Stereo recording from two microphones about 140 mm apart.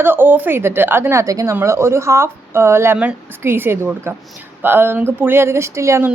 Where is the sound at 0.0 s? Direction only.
15° right (ahead or behind).